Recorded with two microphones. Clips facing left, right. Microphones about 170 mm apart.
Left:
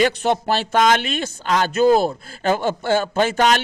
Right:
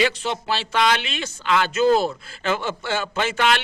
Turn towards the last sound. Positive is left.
turn(degrees=45)  # may be behind; listen again after turning